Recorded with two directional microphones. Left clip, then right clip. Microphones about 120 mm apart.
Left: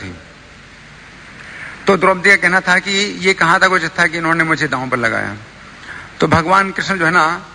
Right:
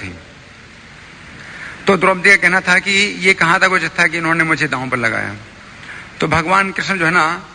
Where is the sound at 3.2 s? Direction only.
45° left (ahead or behind).